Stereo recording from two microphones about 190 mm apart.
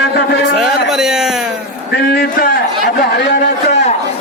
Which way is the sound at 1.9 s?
55° left (ahead or behind).